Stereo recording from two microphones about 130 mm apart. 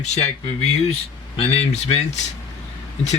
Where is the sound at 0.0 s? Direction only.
60° left (ahead or behind).